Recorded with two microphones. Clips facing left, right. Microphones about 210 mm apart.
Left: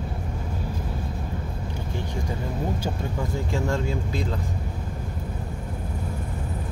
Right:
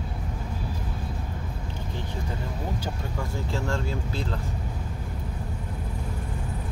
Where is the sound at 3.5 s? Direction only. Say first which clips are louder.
Left 3 dB; 15° left (ahead or behind).